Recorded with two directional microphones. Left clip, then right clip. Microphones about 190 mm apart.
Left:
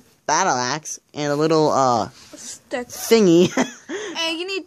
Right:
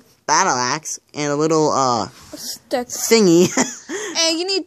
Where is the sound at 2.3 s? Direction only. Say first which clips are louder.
Right 6 dB; 45° right (ahead or behind).